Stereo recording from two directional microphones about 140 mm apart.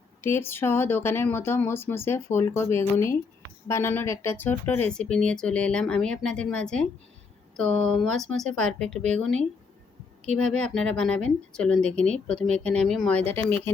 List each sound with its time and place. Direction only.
0.2 s speech: 15° left (ahead or behind)